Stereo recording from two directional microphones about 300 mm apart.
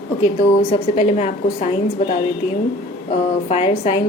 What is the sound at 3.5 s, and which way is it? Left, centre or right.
Speech, centre.